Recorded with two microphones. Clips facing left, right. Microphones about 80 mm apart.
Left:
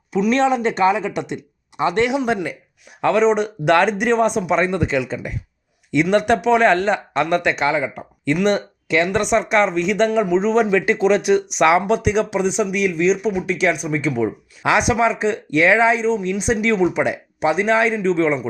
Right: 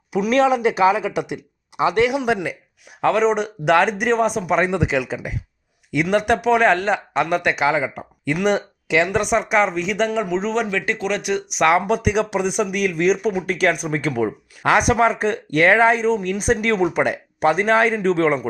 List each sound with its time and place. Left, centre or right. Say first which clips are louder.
0.1 s speech: even; centre
13.0 s speech: right 1 dB; right
14.6 s speech: right 1 dB; centre
15.4 s speech: even; right